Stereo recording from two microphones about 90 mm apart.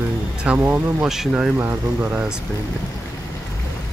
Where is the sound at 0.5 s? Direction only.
25° right (ahead or behind).